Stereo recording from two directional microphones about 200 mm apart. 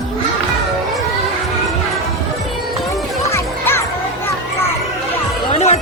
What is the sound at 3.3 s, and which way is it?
Children playing, 10° left (ahead or behind).